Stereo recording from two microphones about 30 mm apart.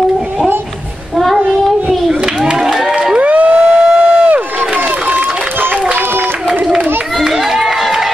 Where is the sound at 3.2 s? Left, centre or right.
Right.